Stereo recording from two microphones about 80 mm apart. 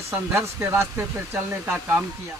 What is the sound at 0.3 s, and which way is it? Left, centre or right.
A man's voice, right.